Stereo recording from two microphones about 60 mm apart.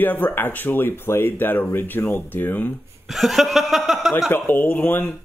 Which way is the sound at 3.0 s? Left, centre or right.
Centre.